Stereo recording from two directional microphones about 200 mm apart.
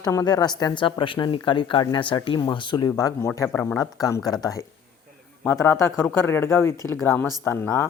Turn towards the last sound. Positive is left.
turn(degrees=10)  # may be behind; listen again after turning